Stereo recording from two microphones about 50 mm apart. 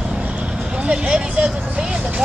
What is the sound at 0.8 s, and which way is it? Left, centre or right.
Vehicle, right.